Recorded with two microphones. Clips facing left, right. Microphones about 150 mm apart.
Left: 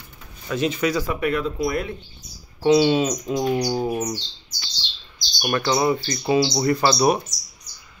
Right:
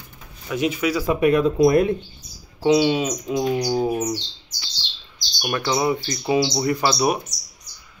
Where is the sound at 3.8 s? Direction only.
10° right (ahead or behind).